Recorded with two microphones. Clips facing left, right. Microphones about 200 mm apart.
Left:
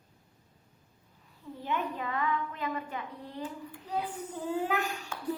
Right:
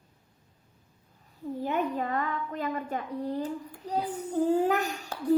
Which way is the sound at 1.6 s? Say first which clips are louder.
Right 4 dB; 45° right (ahead or behind).